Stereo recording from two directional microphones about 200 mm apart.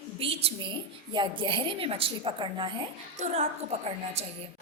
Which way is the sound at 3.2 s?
35° right (ahead or behind).